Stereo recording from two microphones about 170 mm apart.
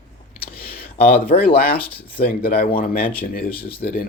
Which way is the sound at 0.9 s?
65° left (ahead or behind).